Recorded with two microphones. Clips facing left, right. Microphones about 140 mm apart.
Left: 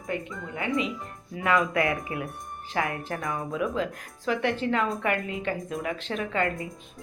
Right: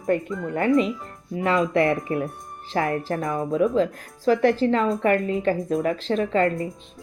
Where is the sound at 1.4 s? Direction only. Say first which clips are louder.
Right 4 dB; 30° right (ahead or behind).